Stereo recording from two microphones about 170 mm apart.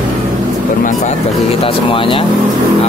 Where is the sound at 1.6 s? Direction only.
30° left (ahead or behind).